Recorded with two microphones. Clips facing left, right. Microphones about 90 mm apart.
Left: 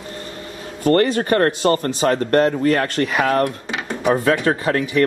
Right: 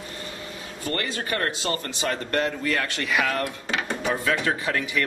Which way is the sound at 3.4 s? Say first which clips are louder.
Left 4 dB; 20° left (ahead or behind).